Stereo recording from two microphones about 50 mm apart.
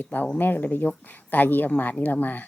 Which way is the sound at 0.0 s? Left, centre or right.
Left.